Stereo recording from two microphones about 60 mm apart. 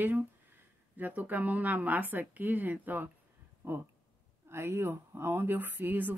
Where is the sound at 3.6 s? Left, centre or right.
Right.